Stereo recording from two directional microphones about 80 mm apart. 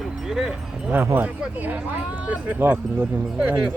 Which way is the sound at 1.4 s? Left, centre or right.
Centre.